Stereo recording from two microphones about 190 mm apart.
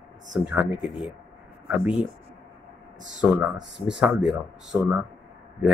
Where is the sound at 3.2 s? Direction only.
5° right (ahead or behind).